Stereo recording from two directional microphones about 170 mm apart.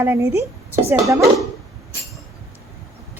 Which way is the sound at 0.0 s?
15° right (ahead or behind).